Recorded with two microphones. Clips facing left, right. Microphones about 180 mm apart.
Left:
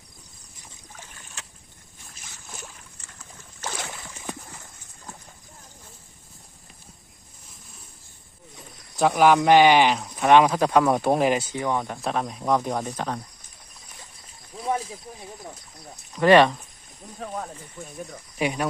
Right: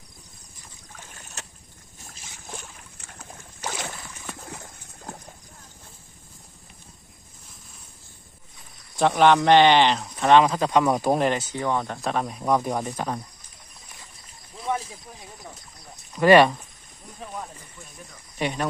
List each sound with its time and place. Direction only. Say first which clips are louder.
1.1 s boat: right 2 dB; 40° right (ahead or behind)
3.0 s boat: right 8 dB; 60° right (ahead or behind)
3.6 s boat: right 1 dB; 10° right (ahead or behind)
4.4 s a sound: right 4 dB; 60° right (ahead or behind)
9.0 s speech: even; 5° left (ahead or behind)
12.0 s speech: even; centre (ahead or behind)
16.1 s speech: right 1 dB; 10° right (ahead or behind)
18.3 s speech: left 1 dB; 5° left (ahead or behind)